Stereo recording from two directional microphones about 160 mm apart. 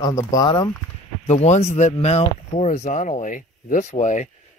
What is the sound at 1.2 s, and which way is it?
Speech, 45° left (ahead or behind).